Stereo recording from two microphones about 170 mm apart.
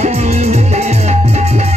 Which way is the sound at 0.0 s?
40° right (ahead or behind).